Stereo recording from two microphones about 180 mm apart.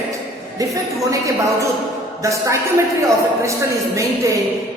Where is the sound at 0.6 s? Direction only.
20° right (ahead or behind).